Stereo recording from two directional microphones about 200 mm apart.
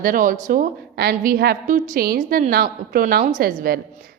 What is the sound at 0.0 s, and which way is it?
A woman's voice, 45° right (ahead or behind).